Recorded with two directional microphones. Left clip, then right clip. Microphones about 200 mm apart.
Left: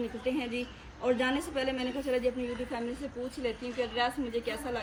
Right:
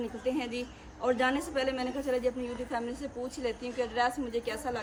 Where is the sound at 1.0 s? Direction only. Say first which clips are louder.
Right 1 dB; 20° right (ahead or behind).